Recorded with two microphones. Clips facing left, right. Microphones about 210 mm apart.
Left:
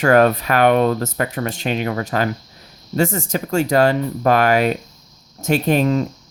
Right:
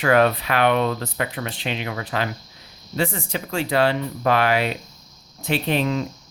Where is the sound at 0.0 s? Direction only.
45° left (ahead or behind).